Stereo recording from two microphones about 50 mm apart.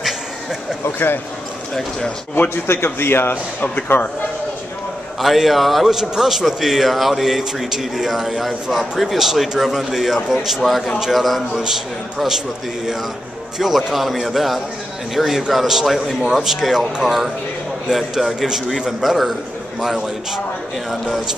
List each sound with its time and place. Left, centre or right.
0.0 s a sound: centre
0.8 s a man's voice: left
2.5 s a man's voice: left
5.2 s a man's voice: centre
13.6 s a man's voice: centre